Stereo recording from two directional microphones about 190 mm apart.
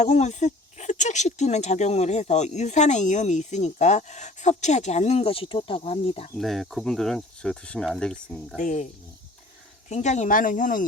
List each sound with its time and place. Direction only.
0.0 s speech: 40° left (ahead or behind)
6.3 s speech: centre (ahead or behind)
8.5 s speech: 40° left (ahead or behind)
9.9 s speech: 40° left (ahead or behind)